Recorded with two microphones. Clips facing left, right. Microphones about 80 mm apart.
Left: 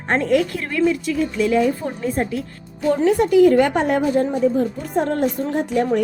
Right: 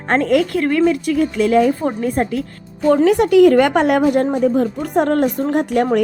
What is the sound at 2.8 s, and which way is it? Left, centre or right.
A woman's voice, right.